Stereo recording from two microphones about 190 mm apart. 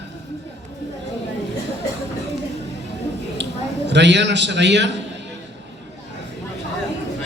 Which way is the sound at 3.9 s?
65° right (ahead or behind).